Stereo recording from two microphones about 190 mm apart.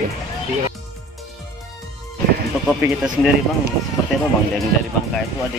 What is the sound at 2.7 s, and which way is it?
Speech, 5° right (ahead or behind).